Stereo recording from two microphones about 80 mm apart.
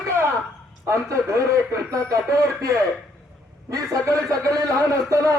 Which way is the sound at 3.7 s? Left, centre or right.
Right.